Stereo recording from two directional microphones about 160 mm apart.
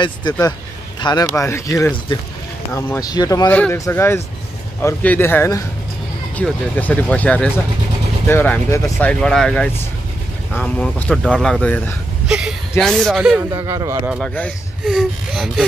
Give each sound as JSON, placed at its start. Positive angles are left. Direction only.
{"t": 0.0, "sound": "speech", "side_deg": 25}
{"t": 3.4, "sound": "speech", "side_deg": 10}
{"t": 9.2, "sound": "speech", "side_deg": 5}
{"t": 12.3, "sound": "a sound", "side_deg": -5}
{"t": 12.8, "sound": "speech", "side_deg": 0}
{"t": 13.5, "sound": "speech", "side_deg": -25}
{"t": 14.2, "sound": "speech", "side_deg": 5}